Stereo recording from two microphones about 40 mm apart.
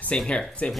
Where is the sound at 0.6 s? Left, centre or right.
Left.